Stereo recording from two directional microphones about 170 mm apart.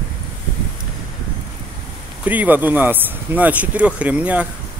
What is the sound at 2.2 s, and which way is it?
Speech, 10° right (ahead or behind).